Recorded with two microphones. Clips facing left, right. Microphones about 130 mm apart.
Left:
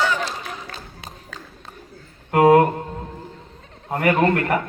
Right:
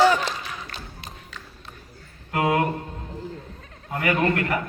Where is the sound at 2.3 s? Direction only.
45° left (ahead or behind).